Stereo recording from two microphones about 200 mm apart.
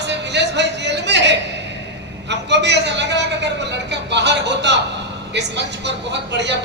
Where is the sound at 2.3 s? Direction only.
60° right (ahead or behind).